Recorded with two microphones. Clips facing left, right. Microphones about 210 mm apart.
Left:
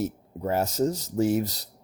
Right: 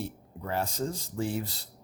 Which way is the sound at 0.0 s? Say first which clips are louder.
Left 8 dB; 40° left (ahead or behind).